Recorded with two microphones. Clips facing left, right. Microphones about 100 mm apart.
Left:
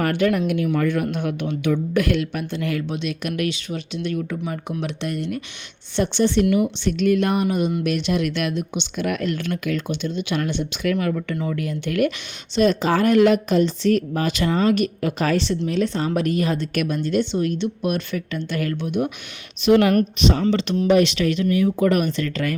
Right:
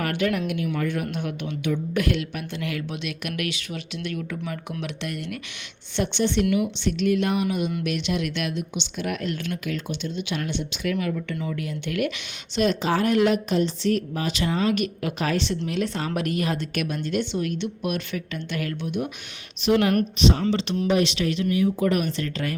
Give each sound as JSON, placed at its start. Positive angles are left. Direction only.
{"t": 0.0, "sound": "speech", "side_deg": 40}
{"t": 19.6, "sound": "speech", "side_deg": 65}
{"t": 19.9, "sound": "speech", "side_deg": 50}